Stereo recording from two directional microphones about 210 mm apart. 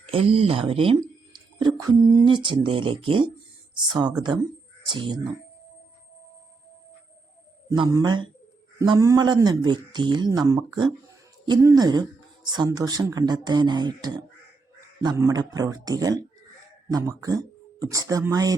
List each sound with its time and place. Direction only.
0.0 s speech: 25° right (ahead or behind)
4.9 s speech: 20° right (ahead or behind)
7.8 s speech: 20° right (ahead or behind)